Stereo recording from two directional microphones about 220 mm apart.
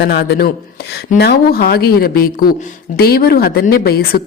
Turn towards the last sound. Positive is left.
turn(degrees=45)  # may be behind; listen again after turning